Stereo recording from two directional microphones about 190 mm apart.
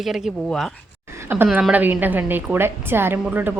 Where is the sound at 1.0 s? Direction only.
15° right (ahead or behind).